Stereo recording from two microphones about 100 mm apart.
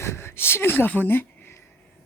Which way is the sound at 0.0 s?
25° left (ahead or behind).